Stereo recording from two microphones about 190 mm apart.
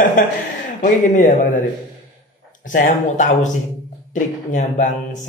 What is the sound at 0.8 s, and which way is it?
Speech, 45° left (ahead or behind).